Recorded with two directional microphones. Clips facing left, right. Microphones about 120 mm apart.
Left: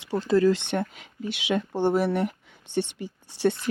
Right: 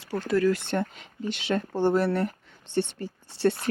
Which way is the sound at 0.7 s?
10° left (ahead or behind).